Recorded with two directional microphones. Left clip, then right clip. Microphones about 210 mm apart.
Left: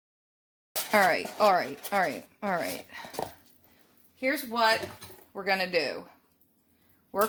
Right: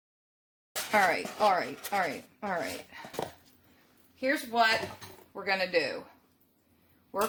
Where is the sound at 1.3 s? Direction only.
40° left (ahead or behind).